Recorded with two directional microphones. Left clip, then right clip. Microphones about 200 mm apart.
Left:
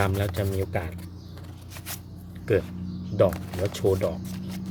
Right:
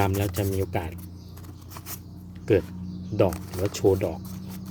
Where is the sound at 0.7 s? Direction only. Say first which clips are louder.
Even; 30° right (ahead or behind).